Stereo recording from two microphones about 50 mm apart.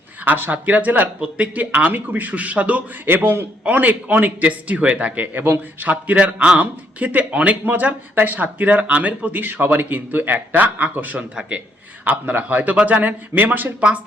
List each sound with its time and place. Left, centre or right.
0.3 s speech: right
3.1 s a man's voice: right
3.6 s speech: right
11.2 s speech: centre
12.0 s speech: right